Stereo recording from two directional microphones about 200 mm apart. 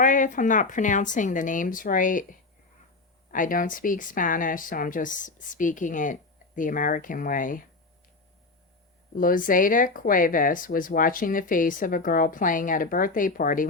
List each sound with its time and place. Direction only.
0.0 s speech: 40° left (ahead or behind)
9.1 s speech: 45° left (ahead or behind)